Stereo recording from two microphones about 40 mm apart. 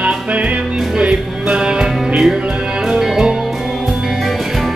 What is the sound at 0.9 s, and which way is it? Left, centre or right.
Music, right.